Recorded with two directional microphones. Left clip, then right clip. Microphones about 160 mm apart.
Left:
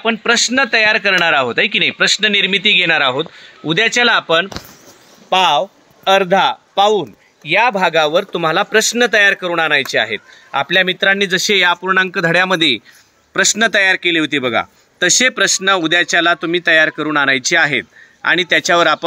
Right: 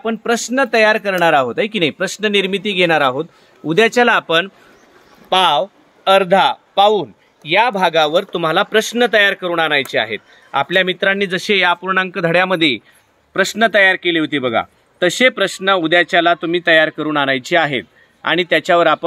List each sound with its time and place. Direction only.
0.0 s speech: 10° left (ahead or behind)